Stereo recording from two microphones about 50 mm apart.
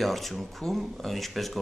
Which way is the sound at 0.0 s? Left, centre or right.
Centre.